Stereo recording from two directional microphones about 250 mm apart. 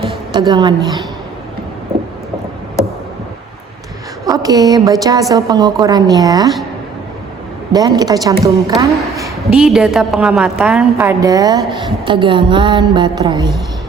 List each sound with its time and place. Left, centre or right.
0.0 s a sound: centre
4.3 s a woman's voice: centre
7.7 s a woman's voice: centre
9.6 s a woman's voice: centre